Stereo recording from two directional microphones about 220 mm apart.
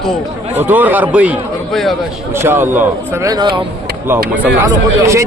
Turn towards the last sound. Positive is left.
turn(degrees=-15)  # may be behind; listen again after turning